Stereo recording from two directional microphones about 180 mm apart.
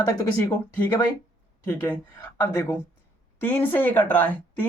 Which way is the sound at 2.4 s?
15° left (ahead or behind).